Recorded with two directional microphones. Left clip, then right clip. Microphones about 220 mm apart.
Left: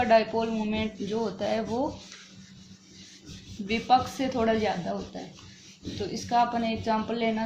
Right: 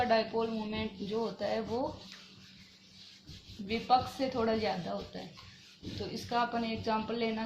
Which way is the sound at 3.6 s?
30° left (ahead or behind).